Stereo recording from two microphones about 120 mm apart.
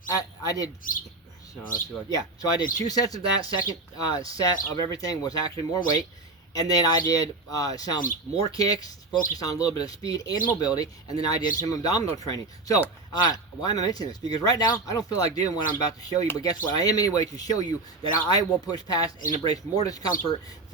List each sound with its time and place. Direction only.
0.2 s speech: 30° left (ahead or behind)